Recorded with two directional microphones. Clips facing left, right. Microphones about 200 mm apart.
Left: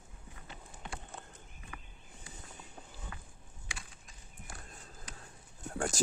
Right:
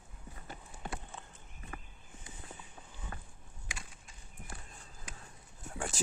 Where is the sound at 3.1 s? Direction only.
40° right (ahead or behind).